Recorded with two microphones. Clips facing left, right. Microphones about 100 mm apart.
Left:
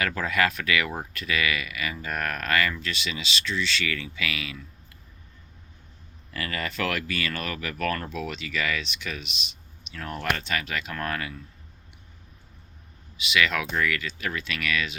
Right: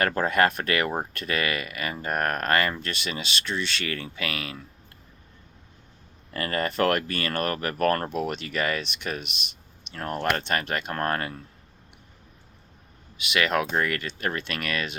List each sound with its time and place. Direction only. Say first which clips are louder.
0.0 s speech: right 4 dB; 45° right (ahead or behind)
6.3 s speech: right 5 dB; 45° right (ahead or behind)
13.2 s speech: right 1 dB; 50° right (ahead or behind)